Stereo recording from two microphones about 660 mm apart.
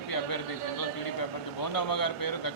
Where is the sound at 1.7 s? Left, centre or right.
Left.